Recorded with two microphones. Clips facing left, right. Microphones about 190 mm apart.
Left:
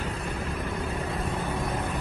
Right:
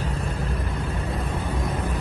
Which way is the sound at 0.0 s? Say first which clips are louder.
Right 3 dB; 35° right (ahead or behind).